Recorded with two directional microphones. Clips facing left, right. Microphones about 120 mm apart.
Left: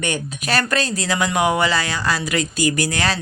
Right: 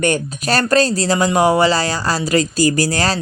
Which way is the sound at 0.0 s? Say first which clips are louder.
Right 7 dB; 40° right (ahead or behind).